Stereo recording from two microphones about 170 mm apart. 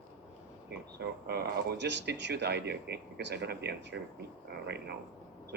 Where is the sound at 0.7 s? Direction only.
75° right (ahead or behind).